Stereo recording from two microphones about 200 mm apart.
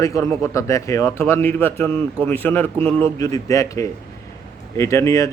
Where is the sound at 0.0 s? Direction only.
15° left (ahead or behind).